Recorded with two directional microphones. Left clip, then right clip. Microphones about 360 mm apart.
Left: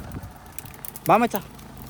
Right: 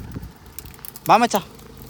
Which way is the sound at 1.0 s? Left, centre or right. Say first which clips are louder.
Right 4 dB; centre.